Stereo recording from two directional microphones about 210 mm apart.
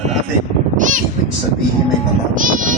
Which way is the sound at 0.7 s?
40° right (ahead or behind).